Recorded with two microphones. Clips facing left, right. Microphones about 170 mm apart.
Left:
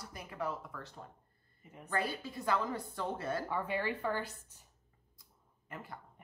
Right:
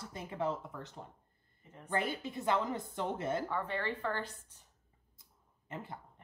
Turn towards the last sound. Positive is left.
turn(degrees=-25)  # may be behind; listen again after turning